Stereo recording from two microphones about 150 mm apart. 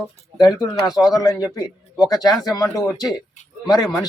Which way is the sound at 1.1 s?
25° left (ahead or behind).